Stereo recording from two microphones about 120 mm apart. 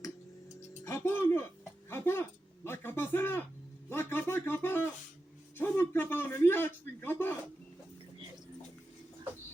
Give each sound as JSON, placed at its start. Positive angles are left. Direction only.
{"t": 0.9, "sound": "music", "side_deg": 20}
{"t": 1.9, "sound": "a sound", "side_deg": 20}
{"t": 2.6, "sound": "a man's voice", "side_deg": 20}